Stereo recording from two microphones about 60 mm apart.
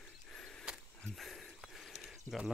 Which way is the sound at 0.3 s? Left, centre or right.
Centre.